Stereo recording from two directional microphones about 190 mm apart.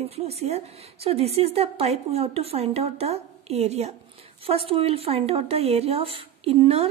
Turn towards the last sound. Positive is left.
turn(degrees=-30)  # may be behind; listen again after turning